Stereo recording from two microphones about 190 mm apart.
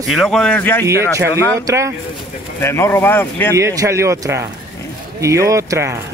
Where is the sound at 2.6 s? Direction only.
15° left (ahead or behind).